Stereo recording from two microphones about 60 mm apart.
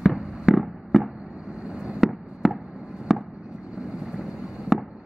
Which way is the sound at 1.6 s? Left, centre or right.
Centre.